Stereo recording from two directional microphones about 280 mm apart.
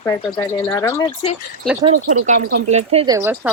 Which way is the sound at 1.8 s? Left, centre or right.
Right.